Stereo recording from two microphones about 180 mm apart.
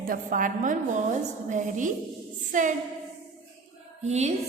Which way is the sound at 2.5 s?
45° right (ahead or behind).